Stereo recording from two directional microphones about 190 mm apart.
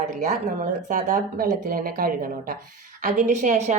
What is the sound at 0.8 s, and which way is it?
A woman's voice, 40° right (ahead or behind).